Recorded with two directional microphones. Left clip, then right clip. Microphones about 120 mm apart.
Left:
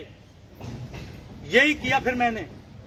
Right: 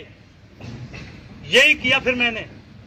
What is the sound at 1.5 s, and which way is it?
Speech, 35° left (ahead or behind).